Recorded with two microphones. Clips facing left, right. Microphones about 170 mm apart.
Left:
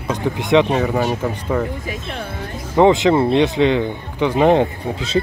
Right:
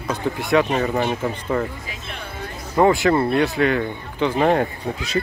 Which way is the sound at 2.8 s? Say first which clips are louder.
Left 3 dB; 20° left (ahead or behind).